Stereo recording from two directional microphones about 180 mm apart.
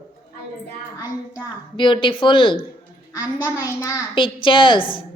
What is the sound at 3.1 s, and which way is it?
Speech, 15° left (ahead or behind).